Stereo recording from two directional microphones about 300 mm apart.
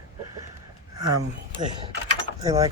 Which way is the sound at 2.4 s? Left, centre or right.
Centre.